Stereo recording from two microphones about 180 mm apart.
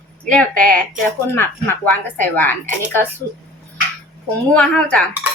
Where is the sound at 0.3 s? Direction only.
5° left (ahead or behind).